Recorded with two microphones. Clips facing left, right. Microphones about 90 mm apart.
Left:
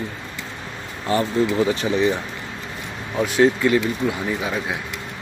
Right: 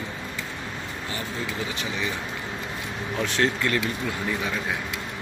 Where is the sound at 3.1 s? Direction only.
10° left (ahead or behind).